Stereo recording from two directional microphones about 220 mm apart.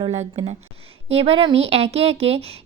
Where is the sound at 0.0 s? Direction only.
25° right (ahead or behind).